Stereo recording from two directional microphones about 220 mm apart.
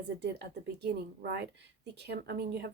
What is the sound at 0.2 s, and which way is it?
Speech, 50° right (ahead or behind).